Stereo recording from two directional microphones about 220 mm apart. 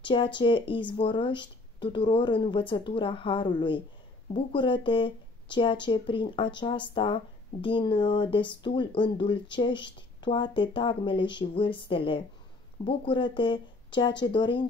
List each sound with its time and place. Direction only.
0.1 s speech: 20° left (ahead or behind)